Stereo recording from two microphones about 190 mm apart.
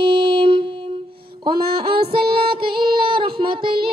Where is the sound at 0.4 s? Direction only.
30° right (ahead or behind).